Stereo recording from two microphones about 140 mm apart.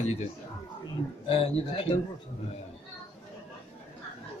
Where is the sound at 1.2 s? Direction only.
40° left (ahead or behind).